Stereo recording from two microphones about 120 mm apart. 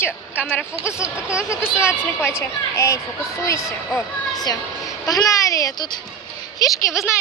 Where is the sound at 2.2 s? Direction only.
20° left (ahead or behind).